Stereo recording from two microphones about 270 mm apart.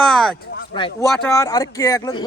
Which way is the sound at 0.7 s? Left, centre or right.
Centre.